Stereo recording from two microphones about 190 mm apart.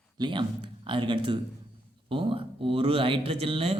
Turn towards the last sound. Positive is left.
turn(degrees=-30)  # may be behind; listen again after turning